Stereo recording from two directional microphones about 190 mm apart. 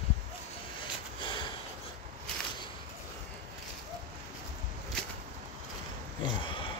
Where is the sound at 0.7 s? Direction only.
25° left (ahead or behind).